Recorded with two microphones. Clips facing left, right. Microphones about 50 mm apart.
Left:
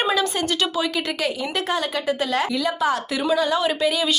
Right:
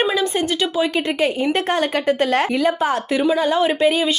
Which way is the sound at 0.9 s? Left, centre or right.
Right.